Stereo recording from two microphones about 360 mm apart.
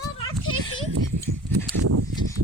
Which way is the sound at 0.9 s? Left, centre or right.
Right.